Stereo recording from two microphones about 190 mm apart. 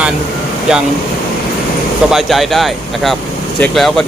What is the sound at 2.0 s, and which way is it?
Speech, centre (ahead or behind).